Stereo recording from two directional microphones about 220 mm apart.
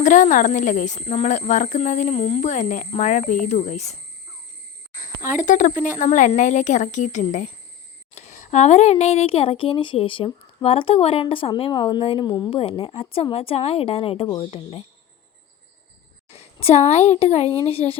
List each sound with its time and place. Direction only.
0.0 s speech: 35° left (ahead or behind)
5.2 s speech: 35° left (ahead or behind)
16.3 s speech: 30° left (ahead or behind)